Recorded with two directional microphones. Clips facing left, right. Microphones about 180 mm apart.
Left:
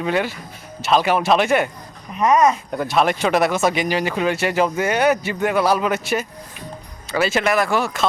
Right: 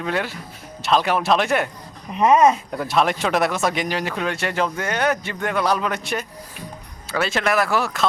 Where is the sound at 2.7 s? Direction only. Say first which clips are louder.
Left 2 dB; centre (ahead or behind).